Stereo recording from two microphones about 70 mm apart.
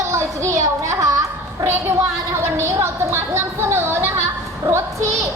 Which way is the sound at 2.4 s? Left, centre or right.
Right.